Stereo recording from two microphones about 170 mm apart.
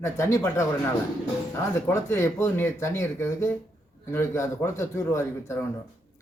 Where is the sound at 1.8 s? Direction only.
15° left (ahead or behind).